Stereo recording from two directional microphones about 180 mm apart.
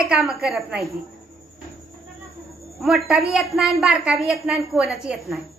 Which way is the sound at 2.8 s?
Centre (ahead or behind).